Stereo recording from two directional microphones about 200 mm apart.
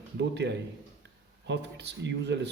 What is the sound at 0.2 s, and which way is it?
Speech, 60° right (ahead or behind).